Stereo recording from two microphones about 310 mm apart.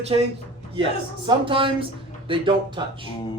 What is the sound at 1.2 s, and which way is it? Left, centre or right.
Speech, centre.